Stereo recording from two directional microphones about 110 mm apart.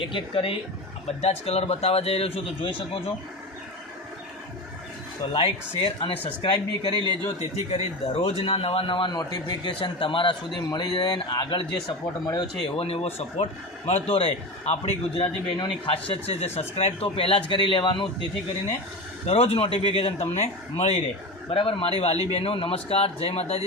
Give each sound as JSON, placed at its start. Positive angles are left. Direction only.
{"t": 0.0, "sound": "speech", "side_deg": 50}
{"t": 1.0, "sound": "speech", "side_deg": 70}
{"t": 5.3, "sound": "speech", "side_deg": 50}
{"t": 7.0, "sound": "speech", "side_deg": -45}
{"t": 7.7, "sound": "speech", "side_deg": 70}
{"t": 9.7, "sound": "speech", "side_deg": 50}
{"t": 10.6, "sound": "speech", "side_deg": 35}
{"t": 12.8, "sound": "speech", "side_deg": 65}
{"t": 15.4, "sound": "speech", "side_deg": 45}
{"t": 15.9, "sound": "speech", "side_deg": 70}
{"t": 19.2, "sound": "speech", "side_deg": 65}
{"t": 21.5, "sound": "speech", "side_deg": 50}